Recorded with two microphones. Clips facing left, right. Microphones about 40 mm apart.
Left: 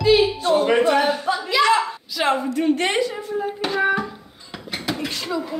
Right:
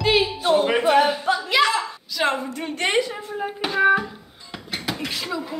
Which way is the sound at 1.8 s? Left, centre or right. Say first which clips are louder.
Left 1 dB; centre.